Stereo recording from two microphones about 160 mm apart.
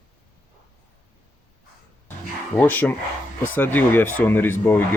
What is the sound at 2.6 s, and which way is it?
Speech, 10° left (ahead or behind).